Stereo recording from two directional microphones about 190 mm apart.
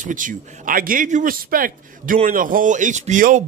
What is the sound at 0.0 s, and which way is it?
Speech, 45° right (ahead or behind).